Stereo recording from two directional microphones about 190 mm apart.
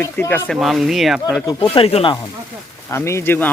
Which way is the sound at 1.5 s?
30° left (ahead or behind).